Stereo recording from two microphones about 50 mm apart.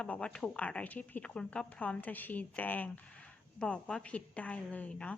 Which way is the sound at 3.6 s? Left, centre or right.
Centre.